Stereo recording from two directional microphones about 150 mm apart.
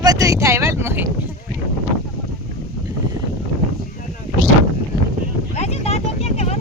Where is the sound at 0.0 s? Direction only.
25° right (ahead or behind).